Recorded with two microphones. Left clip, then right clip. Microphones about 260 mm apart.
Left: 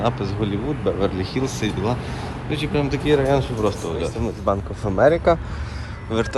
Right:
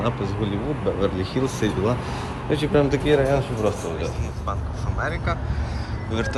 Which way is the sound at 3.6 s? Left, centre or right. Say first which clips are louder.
Even; left.